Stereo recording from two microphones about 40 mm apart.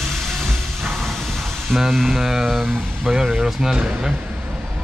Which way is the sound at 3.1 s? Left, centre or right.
Centre.